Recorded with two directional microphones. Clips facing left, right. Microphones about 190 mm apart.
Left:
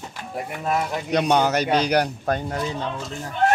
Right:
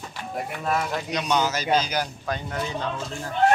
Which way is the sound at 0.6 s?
20° left (ahead or behind).